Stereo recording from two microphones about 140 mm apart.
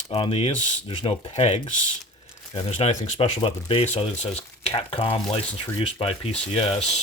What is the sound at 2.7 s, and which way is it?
Speech, 55° left (ahead or behind).